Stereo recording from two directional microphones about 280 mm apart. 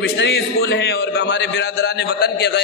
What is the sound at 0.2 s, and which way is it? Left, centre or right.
A woman's voice, left.